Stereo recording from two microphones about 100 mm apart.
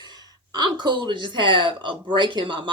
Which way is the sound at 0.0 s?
45° right (ahead or behind).